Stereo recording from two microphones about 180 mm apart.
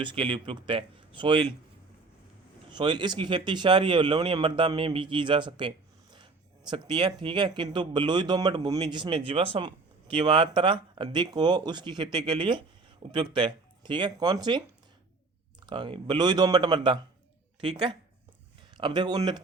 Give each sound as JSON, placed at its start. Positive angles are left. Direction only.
{"t": 0.0, "sound": "speech", "side_deg": -25}
{"t": 2.6, "sound": "speech", "side_deg": -25}
{"t": 15.6, "sound": "speech", "side_deg": -25}